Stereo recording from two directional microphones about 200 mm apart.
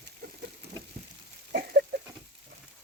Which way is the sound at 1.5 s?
50° right (ahead or behind).